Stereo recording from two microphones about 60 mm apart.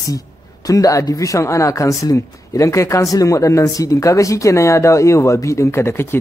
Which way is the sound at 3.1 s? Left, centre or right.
Left.